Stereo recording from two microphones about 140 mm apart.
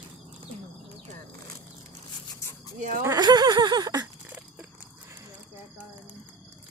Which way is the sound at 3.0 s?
25° right (ahead or behind).